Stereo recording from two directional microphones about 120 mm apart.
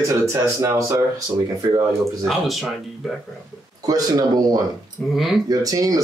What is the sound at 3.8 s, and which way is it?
Speech, 30° right (ahead or behind).